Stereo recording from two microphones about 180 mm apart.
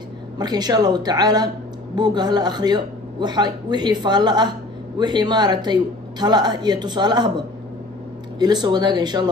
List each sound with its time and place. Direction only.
0.4 s a man's voice: 20° right (ahead or behind)